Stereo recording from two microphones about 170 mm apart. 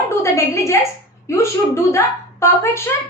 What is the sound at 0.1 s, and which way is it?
A woman's voice, 15° left (ahead or behind).